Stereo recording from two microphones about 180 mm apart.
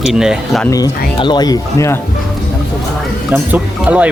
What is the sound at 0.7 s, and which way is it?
Speech, 20° left (ahead or behind).